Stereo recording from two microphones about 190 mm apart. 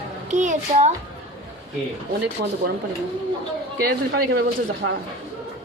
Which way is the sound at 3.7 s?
50° right (ahead or behind).